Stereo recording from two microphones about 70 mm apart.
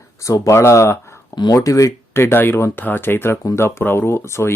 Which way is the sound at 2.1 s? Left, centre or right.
Left.